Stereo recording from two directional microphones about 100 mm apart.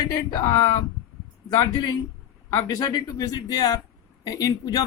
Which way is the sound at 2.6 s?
45° left (ahead or behind).